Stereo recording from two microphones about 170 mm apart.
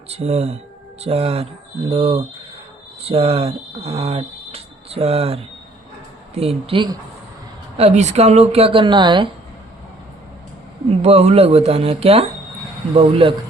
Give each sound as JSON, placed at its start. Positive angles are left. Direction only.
{"t": 0.1, "sound": "speech", "side_deg": -40}
{"t": 11.0, "sound": "speech", "side_deg": -40}